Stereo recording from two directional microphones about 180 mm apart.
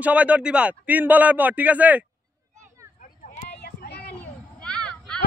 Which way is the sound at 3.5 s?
65° left (ahead or behind).